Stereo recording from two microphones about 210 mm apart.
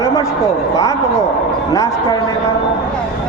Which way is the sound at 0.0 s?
15° left (ahead or behind).